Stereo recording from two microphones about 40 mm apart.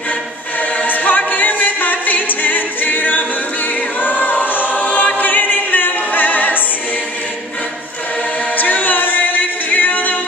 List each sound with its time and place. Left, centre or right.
0.8 s a capella: left
4.0 s choir: left
8.5 s music: left